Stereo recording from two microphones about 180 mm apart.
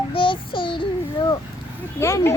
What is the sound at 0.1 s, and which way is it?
Child singing, 30° left (ahead or behind).